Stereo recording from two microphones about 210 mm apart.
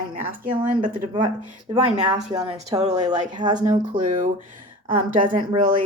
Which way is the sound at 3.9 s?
40° right (ahead or behind).